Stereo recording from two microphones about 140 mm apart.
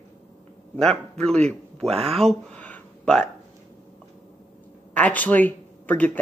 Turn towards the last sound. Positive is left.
turn(degrees=10)  # may be behind; listen again after turning